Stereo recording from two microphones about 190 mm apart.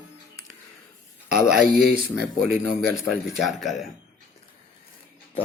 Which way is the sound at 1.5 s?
Centre (ahead or behind).